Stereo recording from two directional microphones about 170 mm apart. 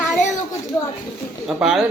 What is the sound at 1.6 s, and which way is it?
Speech, 5° right (ahead or behind).